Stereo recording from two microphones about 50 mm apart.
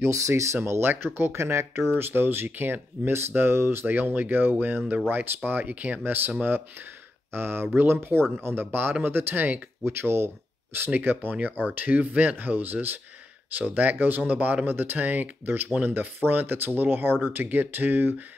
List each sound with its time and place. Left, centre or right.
0.1 s speech: right
0.7 s speech: right
1.3 s speech: right
2.0 s speech: right
3.8 s speech: right
7.3 s speech: right
9.8 s speech: right
10.9 s speech: right